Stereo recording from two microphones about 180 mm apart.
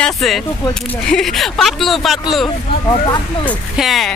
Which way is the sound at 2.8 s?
20° left (ahead or behind).